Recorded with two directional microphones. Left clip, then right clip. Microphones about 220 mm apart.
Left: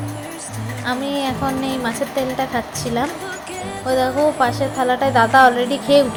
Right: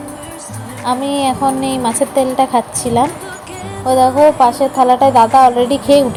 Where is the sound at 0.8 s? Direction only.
15° right (ahead or behind).